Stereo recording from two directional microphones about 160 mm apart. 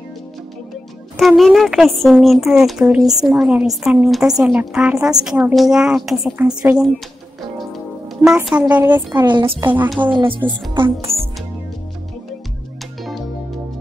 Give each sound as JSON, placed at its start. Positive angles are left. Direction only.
{"t": 1.1, "sound": "a woman's voice", "side_deg": 0}
{"t": 8.5, "sound": "a woman's voice", "side_deg": -10}
{"t": 9.2, "sound": "a woman's voice", "side_deg": -25}